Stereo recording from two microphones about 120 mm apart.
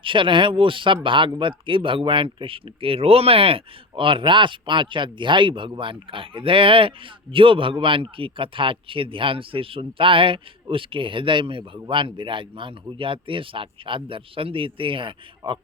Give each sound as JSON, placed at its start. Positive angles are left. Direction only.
{"t": 0.0, "sound": "speech", "side_deg": -45}